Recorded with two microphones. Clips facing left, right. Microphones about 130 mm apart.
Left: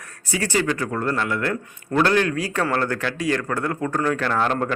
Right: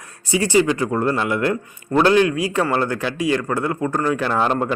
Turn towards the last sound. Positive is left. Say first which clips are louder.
# right 2 dB
turn(degrees=-10)  # may be behind; listen again after turning